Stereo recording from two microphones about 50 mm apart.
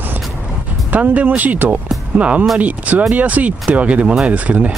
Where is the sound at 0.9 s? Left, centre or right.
Right.